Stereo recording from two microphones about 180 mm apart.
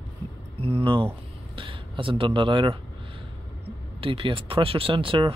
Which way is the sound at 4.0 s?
30° right (ahead or behind).